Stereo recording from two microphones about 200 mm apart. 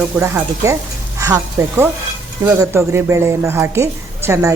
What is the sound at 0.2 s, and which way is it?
Speech, 15° right (ahead or behind).